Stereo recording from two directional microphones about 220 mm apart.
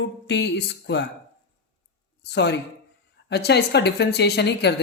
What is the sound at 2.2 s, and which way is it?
Speech, 50° left (ahead or behind).